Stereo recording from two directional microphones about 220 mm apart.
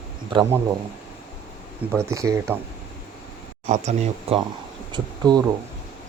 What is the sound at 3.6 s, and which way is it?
Speech, 35° right (ahead or behind).